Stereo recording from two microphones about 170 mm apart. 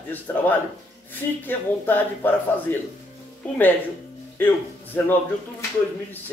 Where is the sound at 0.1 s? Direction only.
10° left (ahead or behind).